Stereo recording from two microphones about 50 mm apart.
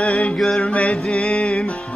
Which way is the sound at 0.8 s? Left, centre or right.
Left.